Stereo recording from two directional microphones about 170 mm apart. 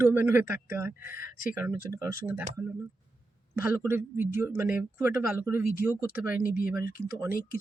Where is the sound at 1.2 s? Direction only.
55° left (ahead or behind).